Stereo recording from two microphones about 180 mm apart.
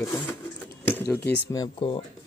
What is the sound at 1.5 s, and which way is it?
Speech, 25° left (ahead or behind).